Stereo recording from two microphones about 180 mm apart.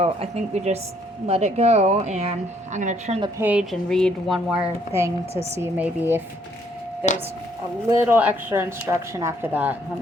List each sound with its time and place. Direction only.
0.0 s speech: 35° right (ahead or behind)
3.3 s speech: 10° right (ahead or behind)
7.9 s speech: 10° right (ahead or behind)